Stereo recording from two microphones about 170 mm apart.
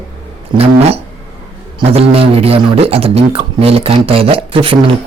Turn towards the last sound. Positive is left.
turn(degrees=-30)  # may be behind; listen again after turning